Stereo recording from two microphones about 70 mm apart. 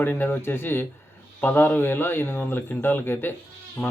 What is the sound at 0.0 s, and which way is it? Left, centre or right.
Speech, left.